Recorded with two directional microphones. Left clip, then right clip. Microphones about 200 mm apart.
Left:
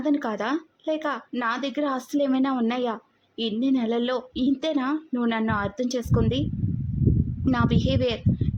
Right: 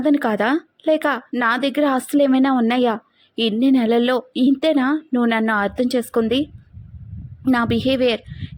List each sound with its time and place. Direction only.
0.0 s speech: 20° right (ahead or behind)
7.4 s speech: 20° right (ahead or behind)